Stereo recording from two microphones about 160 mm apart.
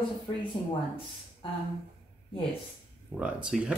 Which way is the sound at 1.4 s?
35° left (ahead or behind).